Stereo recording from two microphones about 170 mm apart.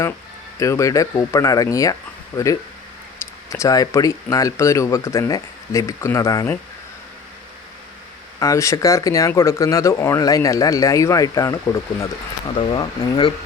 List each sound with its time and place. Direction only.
0.6 s speech: 20° left (ahead or behind)
8.4 s speech: 20° left (ahead or behind)